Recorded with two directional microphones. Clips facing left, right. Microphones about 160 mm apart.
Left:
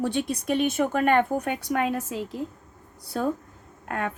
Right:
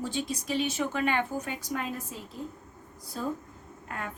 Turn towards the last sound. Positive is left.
turn(degrees=65)  # may be behind; listen again after turning